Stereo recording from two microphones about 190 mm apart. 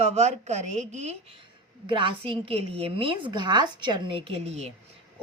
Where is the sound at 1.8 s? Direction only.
25° right (ahead or behind).